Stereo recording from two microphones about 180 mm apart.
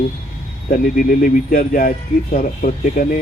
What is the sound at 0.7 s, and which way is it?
Speech, 50° left (ahead or behind).